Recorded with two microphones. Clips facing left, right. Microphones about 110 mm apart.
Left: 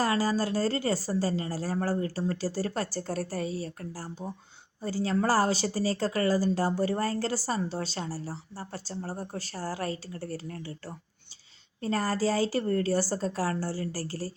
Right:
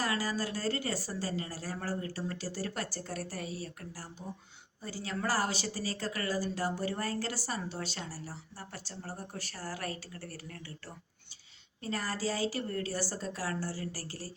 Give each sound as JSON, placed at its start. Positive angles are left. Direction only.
{"t": 0.0, "sound": "speech", "side_deg": 35}
{"t": 11.8, "sound": "speech", "side_deg": 40}